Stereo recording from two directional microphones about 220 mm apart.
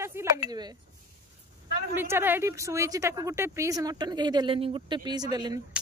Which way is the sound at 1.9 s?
10° right (ahead or behind).